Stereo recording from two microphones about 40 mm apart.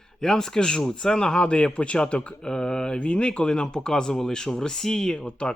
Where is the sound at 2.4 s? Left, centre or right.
Centre.